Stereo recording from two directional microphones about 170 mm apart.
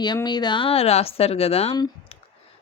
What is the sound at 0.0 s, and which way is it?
Speech, 25° left (ahead or behind).